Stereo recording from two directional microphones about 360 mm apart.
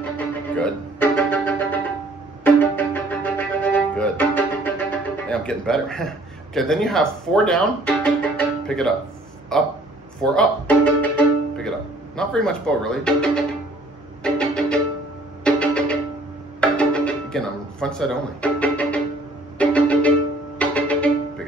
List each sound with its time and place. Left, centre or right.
0.6 s speech: centre
2.4 s music: centre
9.5 s speech: centre
10.2 s music: centre
12.2 s speech: centre
14.2 s music: centre